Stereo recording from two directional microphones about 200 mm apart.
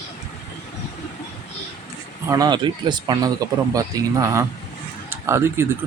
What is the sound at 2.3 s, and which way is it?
Speech, 20° right (ahead or behind).